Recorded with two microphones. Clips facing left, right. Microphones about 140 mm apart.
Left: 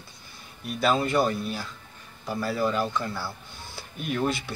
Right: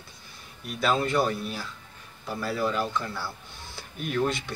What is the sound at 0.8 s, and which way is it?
Speech, centre (ahead or behind).